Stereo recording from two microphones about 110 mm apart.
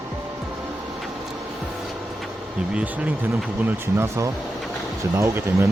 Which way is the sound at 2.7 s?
10° right (ahead or behind).